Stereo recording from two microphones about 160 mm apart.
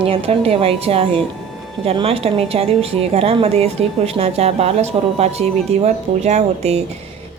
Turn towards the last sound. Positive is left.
turn(degrees=-45)  # may be behind; listen again after turning